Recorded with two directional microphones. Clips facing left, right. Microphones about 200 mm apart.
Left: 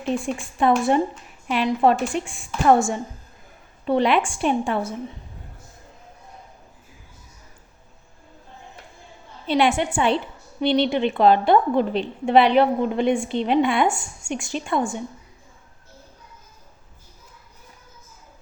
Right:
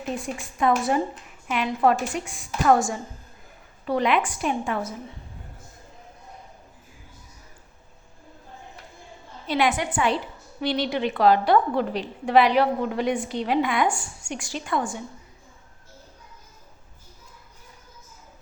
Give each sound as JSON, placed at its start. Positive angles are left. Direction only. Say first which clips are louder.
{"t": 0.3, "sound": "a woman's voice", "louder": "left 1 dB", "side_deg": 30}
{"t": 9.5, "sound": "a woman's voice", "louder": "left 4 dB", "side_deg": 25}